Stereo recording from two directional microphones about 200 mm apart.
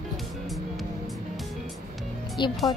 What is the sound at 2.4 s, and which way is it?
Speech, 25° left (ahead or behind).